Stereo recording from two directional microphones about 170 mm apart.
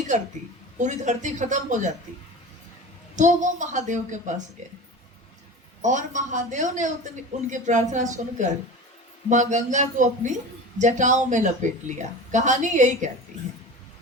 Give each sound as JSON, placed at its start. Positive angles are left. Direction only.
{"t": 0.8, "sound": "speech", "side_deg": -45}
{"t": 3.2, "sound": "speech", "side_deg": -45}
{"t": 5.8, "sound": "speech", "side_deg": -45}